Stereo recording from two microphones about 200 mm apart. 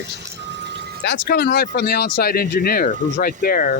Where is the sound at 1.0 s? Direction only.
55° left (ahead or behind).